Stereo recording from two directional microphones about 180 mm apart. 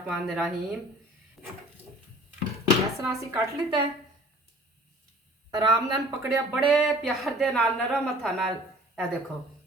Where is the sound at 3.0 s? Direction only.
15° right (ahead or behind).